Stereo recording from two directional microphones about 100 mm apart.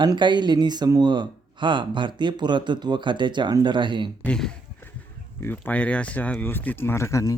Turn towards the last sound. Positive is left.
turn(degrees=30)  # may be behind; listen again after turning